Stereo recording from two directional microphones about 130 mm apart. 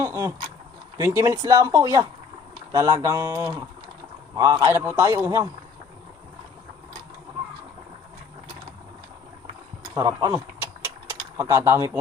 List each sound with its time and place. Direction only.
0.0 s speech: 25° right (ahead or behind)
4.7 s speech: 15° right (ahead or behind)
9.9 s vehicle: 30° right (ahead or behind)
11.3 s speech: 20° right (ahead or behind)